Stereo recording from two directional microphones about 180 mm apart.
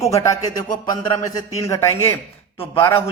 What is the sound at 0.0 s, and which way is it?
Speech, 15° left (ahead or behind).